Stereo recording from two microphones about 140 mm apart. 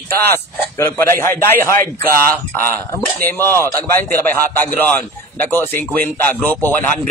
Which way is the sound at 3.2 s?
15° left (ahead or behind).